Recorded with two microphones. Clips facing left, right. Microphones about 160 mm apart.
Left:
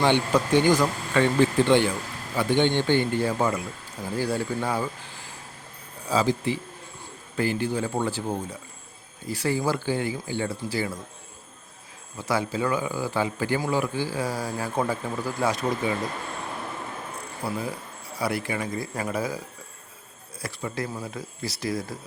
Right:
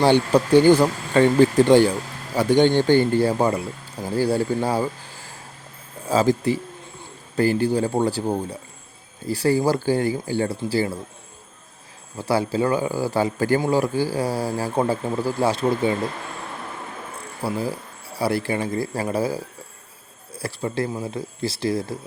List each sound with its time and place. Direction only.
0.0 s speech: 35° right (ahead or behind)
6.1 s speech: 45° right (ahead or behind); by 10.9 s 30° right (ahead or behind)
12.2 s speech: 30° right (ahead or behind)
17.4 s speech: 30° right (ahead or behind)